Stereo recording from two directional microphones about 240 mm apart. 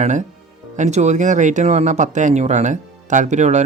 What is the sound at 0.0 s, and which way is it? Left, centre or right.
Speech, right.